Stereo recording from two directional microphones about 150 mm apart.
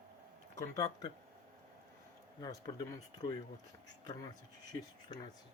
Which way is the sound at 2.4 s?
25° left (ahead or behind).